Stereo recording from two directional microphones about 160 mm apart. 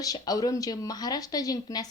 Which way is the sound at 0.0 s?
20° left (ahead or behind).